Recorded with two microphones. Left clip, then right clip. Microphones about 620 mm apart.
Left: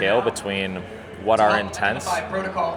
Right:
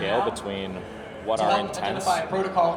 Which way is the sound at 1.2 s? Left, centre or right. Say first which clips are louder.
Left 5 dB; left.